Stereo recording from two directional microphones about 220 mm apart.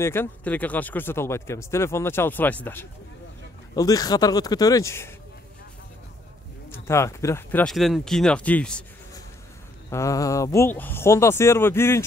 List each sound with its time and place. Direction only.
0.0 s speech: 10° left (ahead or behind)
6.7 s speech: 10° left (ahead or behind)
9.8 s speech: 15° left (ahead or behind)